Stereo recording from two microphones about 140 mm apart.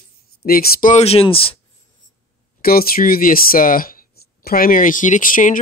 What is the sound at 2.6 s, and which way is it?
Speech, 90° left.